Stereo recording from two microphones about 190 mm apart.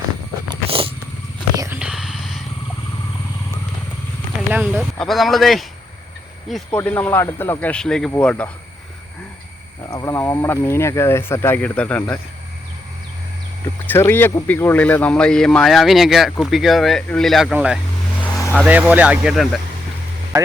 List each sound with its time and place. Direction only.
0.7 s vehicle: 30° right (ahead or behind)
1.5 s a sound: 15° right (ahead or behind)
1.8 s a sound: 5° right (ahead or behind)
4.4 s a sound: 10° right (ahead or behind)
4.9 s speech: centre (ahead or behind)
9.9 s speech: 15° left (ahead or behind)
13.8 s speech: 10° left (ahead or behind); by 17.7 s 5° right (ahead or behind)
18.2 s vehicle: 10° left (ahead or behind)
18.5 s speech: 5° right (ahead or behind)